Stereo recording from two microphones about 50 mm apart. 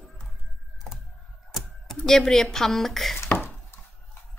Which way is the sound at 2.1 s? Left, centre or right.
Centre.